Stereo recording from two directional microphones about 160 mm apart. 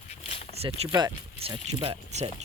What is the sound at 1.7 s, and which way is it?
Speech, 40° right (ahead or behind).